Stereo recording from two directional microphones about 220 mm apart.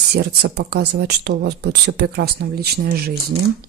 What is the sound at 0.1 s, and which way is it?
Speech, 50° right (ahead or behind).